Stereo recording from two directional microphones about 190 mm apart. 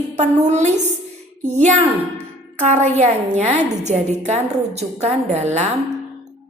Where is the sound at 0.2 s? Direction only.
35° right (ahead or behind).